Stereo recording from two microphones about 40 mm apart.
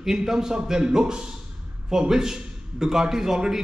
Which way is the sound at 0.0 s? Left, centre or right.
Centre.